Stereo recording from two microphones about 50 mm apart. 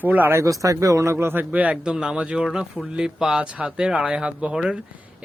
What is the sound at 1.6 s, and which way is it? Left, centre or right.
Speech, right.